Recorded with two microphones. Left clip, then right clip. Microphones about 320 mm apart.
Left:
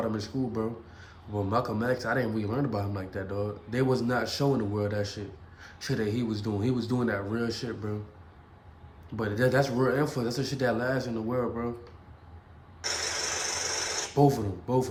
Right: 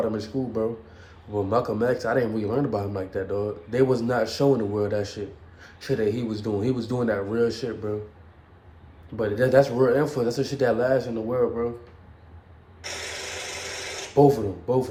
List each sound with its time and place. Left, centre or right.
0.0 s speech: centre
9.1 s speech: centre
13.3 s a sound: centre
14.2 s speech: centre